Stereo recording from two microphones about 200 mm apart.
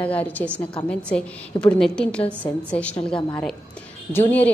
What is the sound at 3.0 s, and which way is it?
Speech, 25° left (ahead or behind).